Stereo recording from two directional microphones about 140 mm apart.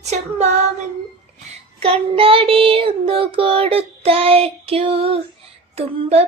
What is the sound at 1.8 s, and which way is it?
Child singing, 40° right (ahead or behind).